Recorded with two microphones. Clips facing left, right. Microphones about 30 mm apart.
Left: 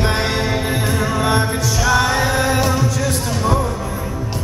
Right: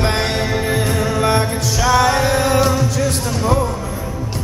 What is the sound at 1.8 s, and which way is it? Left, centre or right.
Music, centre.